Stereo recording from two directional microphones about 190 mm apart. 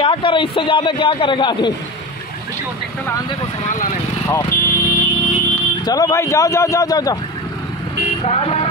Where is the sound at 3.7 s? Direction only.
40° left (ahead or behind).